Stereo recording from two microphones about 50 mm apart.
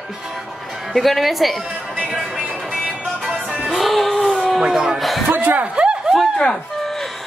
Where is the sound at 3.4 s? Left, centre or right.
Centre.